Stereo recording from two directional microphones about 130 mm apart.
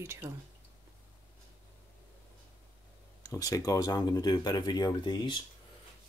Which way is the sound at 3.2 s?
30° left (ahead or behind).